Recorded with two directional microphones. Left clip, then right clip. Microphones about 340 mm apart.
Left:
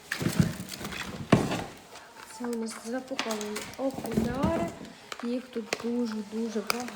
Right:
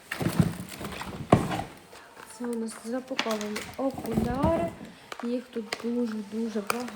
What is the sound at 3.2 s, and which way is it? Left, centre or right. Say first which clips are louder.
Speech: right 5 dB; right.